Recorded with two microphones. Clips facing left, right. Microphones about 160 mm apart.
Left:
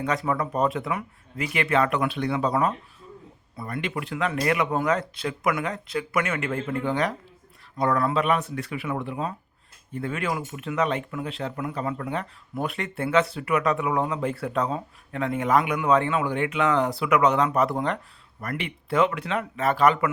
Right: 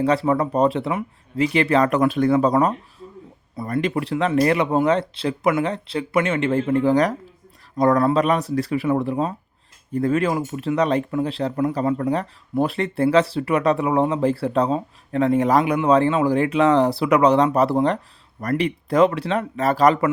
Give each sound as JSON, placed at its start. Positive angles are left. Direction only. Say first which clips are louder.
{"t": 0.0, "sound": "speech", "louder": "right 7 dB", "side_deg": -30}